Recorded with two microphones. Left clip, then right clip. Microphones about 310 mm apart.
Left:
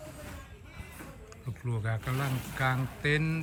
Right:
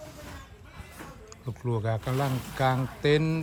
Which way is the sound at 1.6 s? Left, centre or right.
Centre.